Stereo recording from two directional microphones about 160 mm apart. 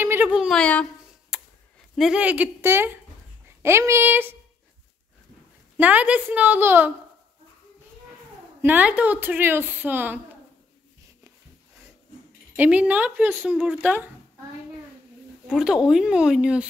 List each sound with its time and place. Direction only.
0.0 s speech: 10° right (ahead or behind)
0.6 s a child's voice: 10° left (ahead or behind)
1.3 s a sound: centre (ahead or behind)
2.0 s a woman's voice: 5° right (ahead or behind)
5.8 s a woman's voice: 10° right (ahead or behind)
8.6 s a woman's voice: 10° right (ahead or behind)
12.5 s a woman's voice: 10° right (ahead or behind)
15.4 s speech: 5° right (ahead or behind)